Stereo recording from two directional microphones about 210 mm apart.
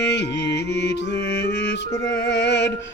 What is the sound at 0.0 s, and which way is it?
Music, 55° left (ahead or behind).